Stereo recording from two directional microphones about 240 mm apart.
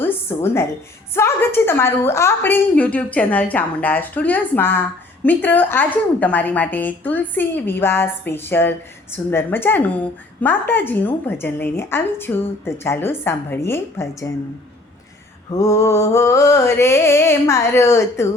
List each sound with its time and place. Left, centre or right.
0.0 s a sound: centre
1.1 s a woman's voice: centre
15.5 s a woman's voice: centre